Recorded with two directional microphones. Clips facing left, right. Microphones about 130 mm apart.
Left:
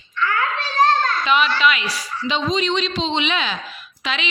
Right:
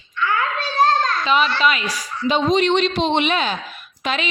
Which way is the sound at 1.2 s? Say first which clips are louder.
Even; 35° right (ahead or behind).